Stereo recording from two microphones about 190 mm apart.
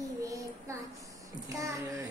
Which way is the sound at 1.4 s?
15° right (ahead or behind).